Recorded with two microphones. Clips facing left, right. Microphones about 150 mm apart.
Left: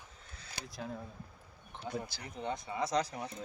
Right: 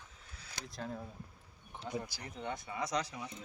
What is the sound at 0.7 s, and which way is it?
Speech, 5° left (ahead or behind).